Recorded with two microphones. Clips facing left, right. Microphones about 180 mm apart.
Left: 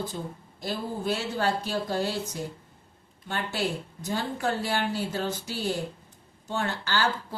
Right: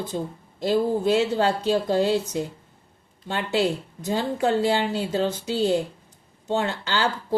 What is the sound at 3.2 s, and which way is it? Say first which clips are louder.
Speech: right 7 dB; 20° right (ahead or behind).